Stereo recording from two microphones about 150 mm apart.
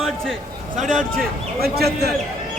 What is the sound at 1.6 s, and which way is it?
Speech, 90° right.